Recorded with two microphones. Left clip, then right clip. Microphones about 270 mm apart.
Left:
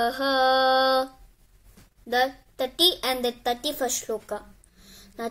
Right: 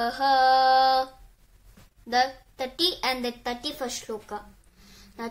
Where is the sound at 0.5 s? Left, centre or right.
Right.